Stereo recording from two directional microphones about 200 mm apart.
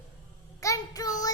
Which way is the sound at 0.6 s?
15° left (ahead or behind).